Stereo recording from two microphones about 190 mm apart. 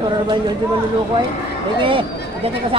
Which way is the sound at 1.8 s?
30° right (ahead or behind).